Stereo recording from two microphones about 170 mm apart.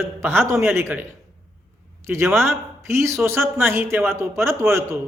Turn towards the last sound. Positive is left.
turn(degrees=-15)  # may be behind; listen again after turning